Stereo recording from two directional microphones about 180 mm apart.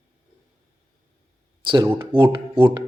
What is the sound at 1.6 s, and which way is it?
Speech, 25° right (ahead or behind).